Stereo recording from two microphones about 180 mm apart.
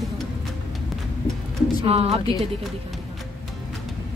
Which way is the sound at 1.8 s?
35° right (ahead or behind).